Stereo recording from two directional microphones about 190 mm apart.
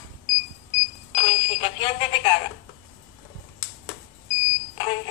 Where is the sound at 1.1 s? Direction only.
25° left (ahead or behind).